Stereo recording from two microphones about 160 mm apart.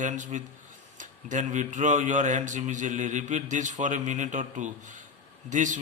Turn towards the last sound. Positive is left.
turn(degrees=-50)  # may be behind; listen again after turning